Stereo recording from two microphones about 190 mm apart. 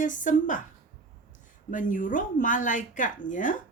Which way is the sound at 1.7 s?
45° left (ahead or behind).